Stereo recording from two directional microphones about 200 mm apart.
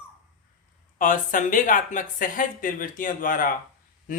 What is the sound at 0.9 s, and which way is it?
Speech, 40° left (ahead or behind).